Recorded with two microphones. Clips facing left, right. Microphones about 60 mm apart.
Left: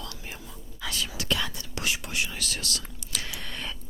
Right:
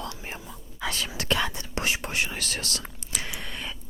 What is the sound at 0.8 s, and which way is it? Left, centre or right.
Whispering, right.